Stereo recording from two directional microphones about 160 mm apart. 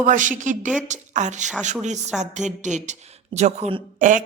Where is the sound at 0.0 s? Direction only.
55° right (ahead or behind).